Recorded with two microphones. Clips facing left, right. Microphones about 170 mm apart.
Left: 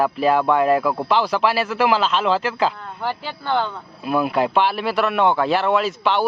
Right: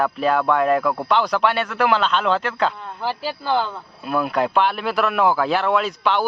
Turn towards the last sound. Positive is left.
turn(degrees=0)  # may be behind; listen again after turning